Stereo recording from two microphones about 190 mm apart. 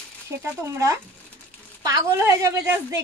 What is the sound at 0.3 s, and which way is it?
A woman's voice, 15° right (ahead or behind).